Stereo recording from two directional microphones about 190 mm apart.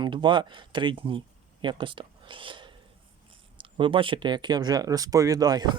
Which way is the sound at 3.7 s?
25° right (ahead or behind).